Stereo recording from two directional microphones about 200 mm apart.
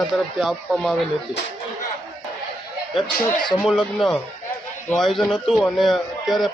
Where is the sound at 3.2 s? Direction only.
25° left (ahead or behind).